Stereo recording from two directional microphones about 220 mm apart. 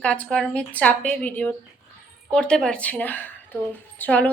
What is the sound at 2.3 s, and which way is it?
A woman's voice, 5° left (ahead or behind).